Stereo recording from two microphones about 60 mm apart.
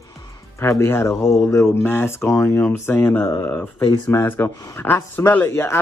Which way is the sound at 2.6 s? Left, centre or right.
Left.